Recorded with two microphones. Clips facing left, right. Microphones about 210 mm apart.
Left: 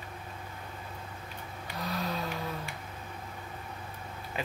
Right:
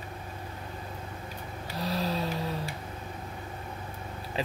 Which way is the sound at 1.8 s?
35° right (ahead or behind).